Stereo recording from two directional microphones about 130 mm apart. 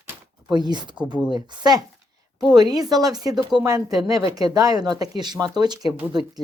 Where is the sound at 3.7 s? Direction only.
30° right (ahead or behind).